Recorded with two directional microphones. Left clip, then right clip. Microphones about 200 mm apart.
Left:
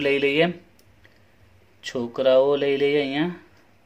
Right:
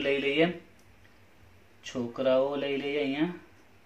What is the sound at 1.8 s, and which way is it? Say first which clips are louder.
Speech: left 7 dB; 55° left (ahead or behind).